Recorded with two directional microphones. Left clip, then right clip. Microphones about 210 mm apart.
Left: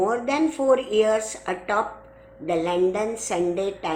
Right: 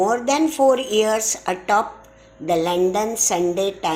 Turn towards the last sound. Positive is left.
turn(degrees=-35)  # may be behind; listen again after turning